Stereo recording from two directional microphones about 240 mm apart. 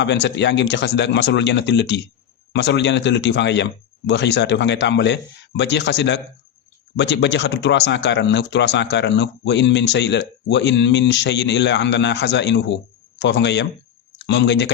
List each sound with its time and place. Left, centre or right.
0.0 s a man's voice: left